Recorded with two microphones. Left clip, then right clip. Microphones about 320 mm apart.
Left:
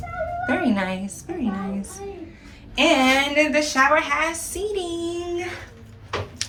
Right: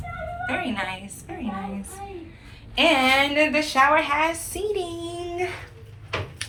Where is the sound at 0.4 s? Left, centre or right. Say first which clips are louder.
Left 3 dB; centre.